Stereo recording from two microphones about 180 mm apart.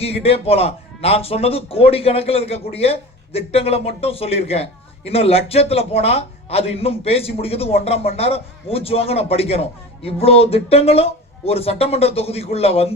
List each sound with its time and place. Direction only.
0.0 s a man's voice: 35° left (ahead or behind)